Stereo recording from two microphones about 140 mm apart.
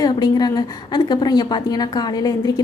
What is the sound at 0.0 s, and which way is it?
A woman's voice, 30° left (ahead or behind).